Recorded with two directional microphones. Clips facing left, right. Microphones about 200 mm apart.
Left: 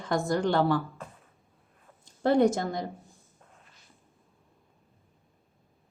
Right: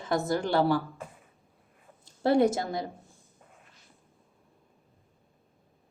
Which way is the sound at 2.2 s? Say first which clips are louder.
Left 1 dB; 5° right (ahead or behind).